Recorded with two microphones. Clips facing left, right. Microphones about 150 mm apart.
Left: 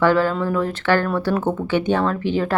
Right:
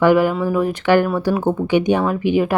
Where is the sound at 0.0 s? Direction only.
15° right (ahead or behind).